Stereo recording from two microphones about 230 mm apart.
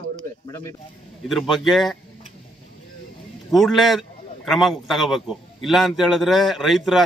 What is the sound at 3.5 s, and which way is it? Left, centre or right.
A man's voice, centre.